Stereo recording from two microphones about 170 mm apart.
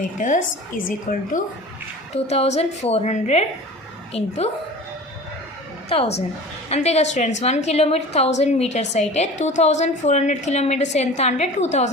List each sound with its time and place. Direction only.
0.2 s a woman's voice: 50° left (ahead or behind)
2.1 s a woman's voice: 35° left (ahead or behind)
5.9 s a woman's voice: 35° left (ahead or behind)